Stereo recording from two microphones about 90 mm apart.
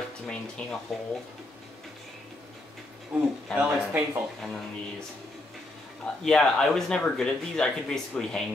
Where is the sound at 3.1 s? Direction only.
15° right (ahead or behind).